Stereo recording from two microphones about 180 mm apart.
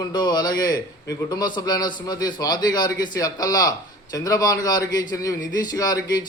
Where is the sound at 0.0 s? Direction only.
25° left (ahead or behind).